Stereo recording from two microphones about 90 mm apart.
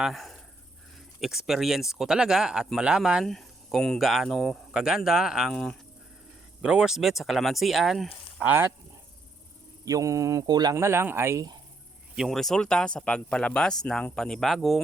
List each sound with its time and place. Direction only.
0.0 s speech: centre (ahead or behind)
3.2 s speech: 5° left (ahead or behind)
5.5 s speech: 5° left (ahead or behind)
6.6 s speech: 10° right (ahead or behind)
9.8 s speech: 40° right (ahead or behind)
10.8 s speech: 30° right (ahead or behind)
12.1 s speech: centre (ahead or behind)